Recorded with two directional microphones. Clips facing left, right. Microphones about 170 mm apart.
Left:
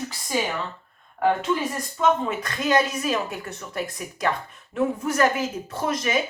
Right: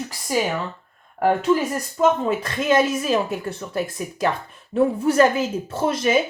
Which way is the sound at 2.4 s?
25° right (ahead or behind).